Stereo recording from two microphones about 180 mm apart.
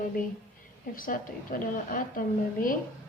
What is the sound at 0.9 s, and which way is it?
A woman's voice, 50° left (ahead or behind).